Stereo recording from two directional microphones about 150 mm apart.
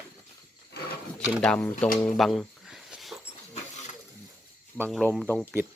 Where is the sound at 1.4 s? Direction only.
5° left (ahead or behind).